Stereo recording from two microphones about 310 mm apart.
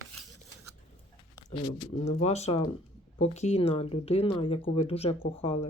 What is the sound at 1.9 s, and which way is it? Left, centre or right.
Speech, left.